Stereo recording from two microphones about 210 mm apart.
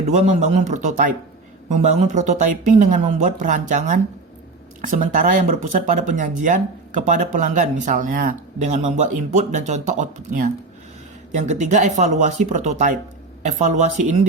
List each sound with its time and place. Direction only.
0.0 s speech: 35° right (ahead or behind)